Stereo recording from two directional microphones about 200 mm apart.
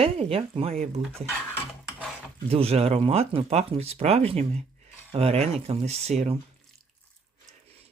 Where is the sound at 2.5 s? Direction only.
30° right (ahead or behind).